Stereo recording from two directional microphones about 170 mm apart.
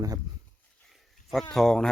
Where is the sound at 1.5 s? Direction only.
5° left (ahead or behind).